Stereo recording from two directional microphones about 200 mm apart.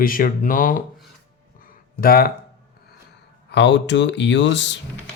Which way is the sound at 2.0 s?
45° left (ahead or behind).